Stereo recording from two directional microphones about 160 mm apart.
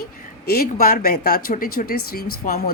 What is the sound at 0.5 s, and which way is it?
A woman's voice, 60° left (ahead or behind).